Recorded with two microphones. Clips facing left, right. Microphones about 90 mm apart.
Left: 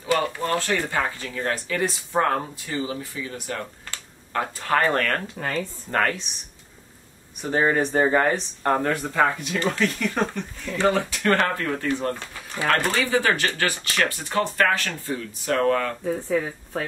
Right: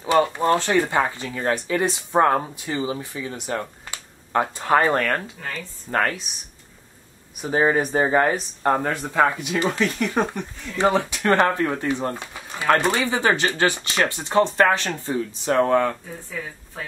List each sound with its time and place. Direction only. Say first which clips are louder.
0.0 s speech: right 5 dB; 25° right (ahead or behind)
7.4 s speech: right 1 dB; 10° right (ahead or behind)